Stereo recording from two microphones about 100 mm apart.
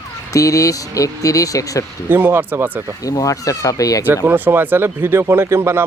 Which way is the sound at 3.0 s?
35° left (ahead or behind).